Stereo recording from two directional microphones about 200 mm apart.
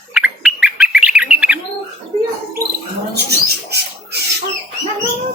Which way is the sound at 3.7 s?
55° right (ahead or behind).